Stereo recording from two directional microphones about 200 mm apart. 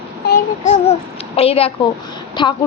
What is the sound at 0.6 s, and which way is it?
Speech, 35° left (ahead or behind).